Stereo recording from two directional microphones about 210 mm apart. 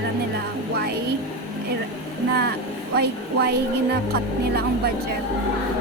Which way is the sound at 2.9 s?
50° right (ahead or behind).